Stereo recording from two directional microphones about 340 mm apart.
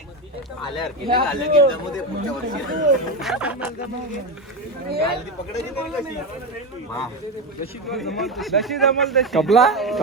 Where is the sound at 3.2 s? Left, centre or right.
Centre.